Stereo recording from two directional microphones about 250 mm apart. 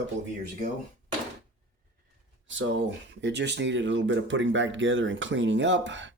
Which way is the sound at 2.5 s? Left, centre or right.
Right.